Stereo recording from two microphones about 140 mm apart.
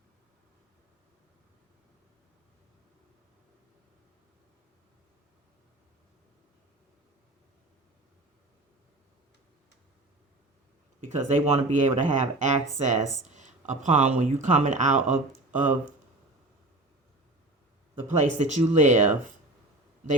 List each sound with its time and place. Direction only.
11.0 s speech: 60° right (ahead or behind)
18.1 s speech: 60° right (ahead or behind)